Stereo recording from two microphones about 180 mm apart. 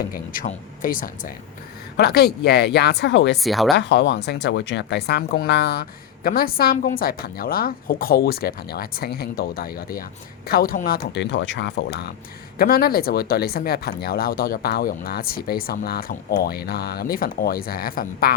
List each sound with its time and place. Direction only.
0.1 s speech: 50° left (ahead or behind)
2.0 s speech: 60° left (ahead or behind)
3.4 s speech: centre (ahead or behind)
3.8 s speech: 70° left (ahead or behind); by 11.0 s 55° left (ahead or behind)
11.1 s speech: 75° left (ahead or behind); by 18.3 s 55° left (ahead or behind)